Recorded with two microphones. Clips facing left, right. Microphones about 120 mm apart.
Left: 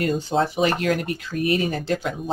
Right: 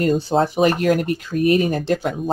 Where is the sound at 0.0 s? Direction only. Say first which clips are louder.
Right 4 dB; 40° right (ahead or behind).